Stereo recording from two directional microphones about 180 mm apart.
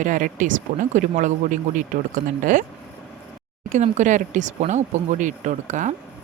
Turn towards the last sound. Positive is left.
turn(degrees=-45)  # may be behind; listen again after turning